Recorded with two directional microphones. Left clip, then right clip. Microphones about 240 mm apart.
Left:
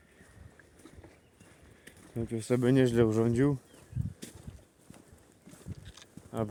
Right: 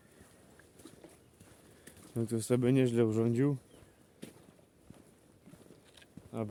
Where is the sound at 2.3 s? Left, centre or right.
Centre.